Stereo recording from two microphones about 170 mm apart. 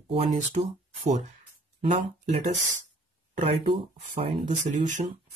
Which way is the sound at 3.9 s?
45° right (ahead or behind).